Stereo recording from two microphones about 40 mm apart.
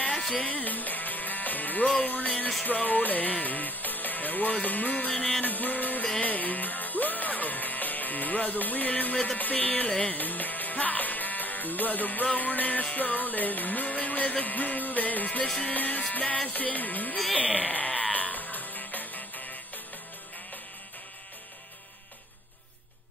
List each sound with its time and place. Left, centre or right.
0.1 s music: centre
0.4 s music: left
2.6 s speech: left
6.2 s music: left
9.8 s music: left
10.1 s speech: left
16.1 s music: left
16.4 s speech: left
18.1 s music: left